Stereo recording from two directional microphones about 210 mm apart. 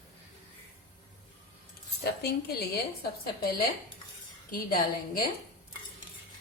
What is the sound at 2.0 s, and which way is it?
Speech, 50° left (ahead or behind).